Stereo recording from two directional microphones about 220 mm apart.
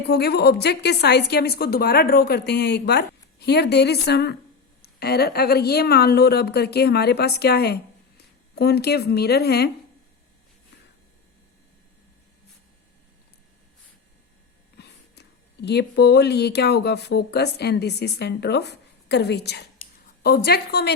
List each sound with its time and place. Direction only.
0.1 s a woman's voice: 45° left (ahead or behind)
14.8 s a woman's voice: 50° left (ahead or behind)